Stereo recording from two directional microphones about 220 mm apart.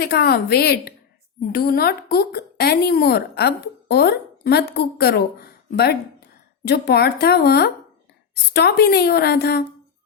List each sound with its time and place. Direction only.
0.0 s a woman's voice: 45° left (ahead or behind)